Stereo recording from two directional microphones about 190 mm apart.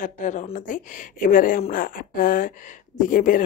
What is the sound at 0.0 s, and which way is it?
Speech, 40° left (ahead or behind).